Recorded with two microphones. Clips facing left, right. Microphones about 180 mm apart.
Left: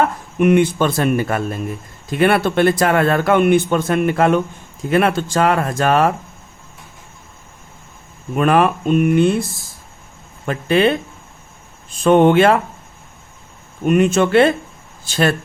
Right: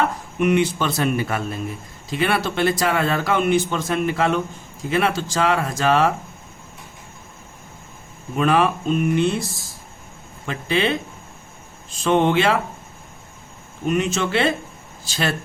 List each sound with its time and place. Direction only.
0.3 s speech: 50° left (ahead or behind)
8.4 s speech: 55° left (ahead or behind)
13.8 s speech: 55° left (ahead or behind)